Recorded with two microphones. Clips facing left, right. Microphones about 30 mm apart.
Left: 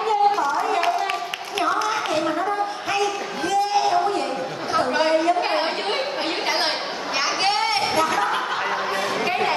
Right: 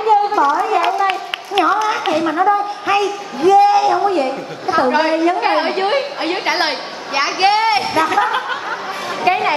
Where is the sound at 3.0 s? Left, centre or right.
Right.